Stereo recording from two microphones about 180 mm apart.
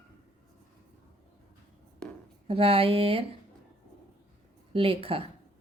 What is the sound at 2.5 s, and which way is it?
Speech, 30° right (ahead or behind).